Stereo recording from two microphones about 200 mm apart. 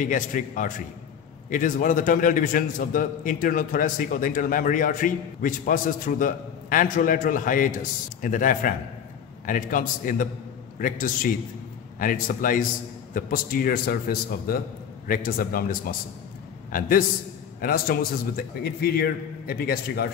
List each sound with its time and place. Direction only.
0.0 s a man's voice: 40° left (ahead or behind)
17.6 s a man's voice: 45° left (ahead or behind)